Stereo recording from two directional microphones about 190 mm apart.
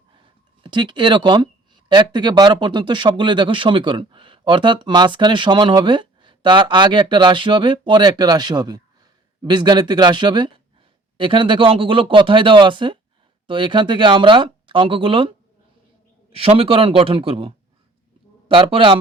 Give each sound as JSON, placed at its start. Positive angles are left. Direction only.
{"t": 0.2, "sound": "speech", "side_deg": -25}
{"t": 16.3, "sound": "speech", "side_deg": -30}